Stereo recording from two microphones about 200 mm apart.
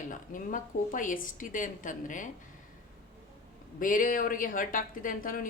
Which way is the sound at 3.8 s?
40° left (ahead or behind).